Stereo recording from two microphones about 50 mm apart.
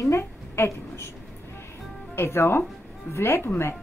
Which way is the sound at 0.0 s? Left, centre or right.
Left.